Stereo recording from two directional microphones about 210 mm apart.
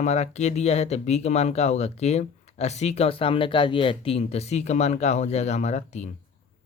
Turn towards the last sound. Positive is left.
turn(degrees=35)  # may be behind; listen again after turning